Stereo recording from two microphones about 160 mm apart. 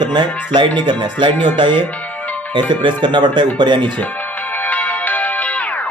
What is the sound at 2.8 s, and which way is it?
Speech, 30° right (ahead or behind).